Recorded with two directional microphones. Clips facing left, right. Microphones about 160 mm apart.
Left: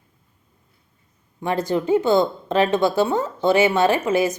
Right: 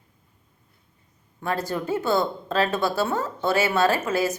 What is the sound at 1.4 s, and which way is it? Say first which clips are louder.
Speech: left 5 dB; 20° left (ahead or behind).